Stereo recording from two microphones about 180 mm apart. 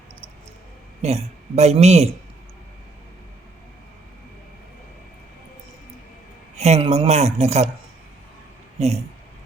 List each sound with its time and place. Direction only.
1.0 s speech: 35° right (ahead or behind)
6.6 s speech: 35° right (ahead or behind)
8.8 s speech: 40° right (ahead or behind)